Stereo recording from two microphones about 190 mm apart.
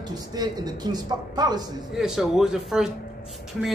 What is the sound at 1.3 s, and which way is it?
Speech, 20° right (ahead or behind).